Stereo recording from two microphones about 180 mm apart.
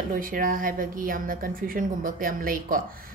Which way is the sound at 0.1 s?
50° right (ahead or behind).